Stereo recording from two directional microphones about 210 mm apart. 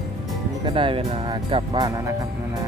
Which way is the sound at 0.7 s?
25° right (ahead or behind).